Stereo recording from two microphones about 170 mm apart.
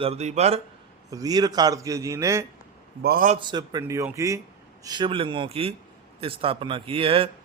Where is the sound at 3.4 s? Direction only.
25° right (ahead or behind).